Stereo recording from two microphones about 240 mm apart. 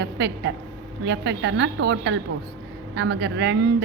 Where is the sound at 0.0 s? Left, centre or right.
Right.